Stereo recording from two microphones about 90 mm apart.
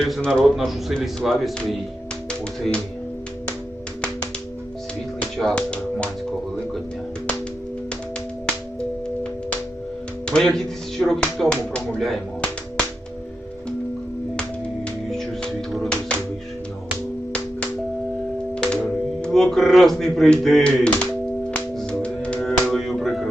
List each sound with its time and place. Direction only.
0.0 s speech: 5° left (ahead or behind)
2.6 s speech: 5° left (ahead or behind)
5.4 s speech: 10° left (ahead or behind)
10.2 s speech: 5° left (ahead or behind)
15.1 s music: 5° left (ahead or behind)
18.5 s music: 10° left (ahead or behind)
19.2 s speech: 5° left (ahead or behind)
21.8 s music: 10° left (ahead or behind)